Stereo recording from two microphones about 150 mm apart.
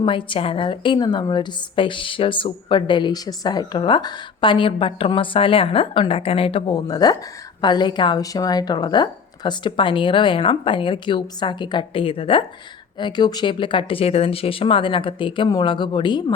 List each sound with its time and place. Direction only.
0.0 s a woman's voice: 35° left (ahead or behind)